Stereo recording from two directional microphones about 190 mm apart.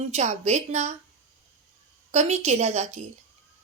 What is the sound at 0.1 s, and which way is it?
Speech, 35° right (ahead or behind).